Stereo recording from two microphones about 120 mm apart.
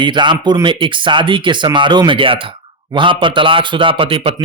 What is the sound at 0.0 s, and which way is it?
Speech, 40° right (ahead or behind).